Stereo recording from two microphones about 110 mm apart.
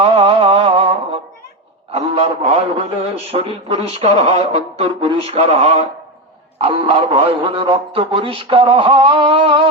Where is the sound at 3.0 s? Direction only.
65° right (ahead or behind); by 4.9 s 80° right.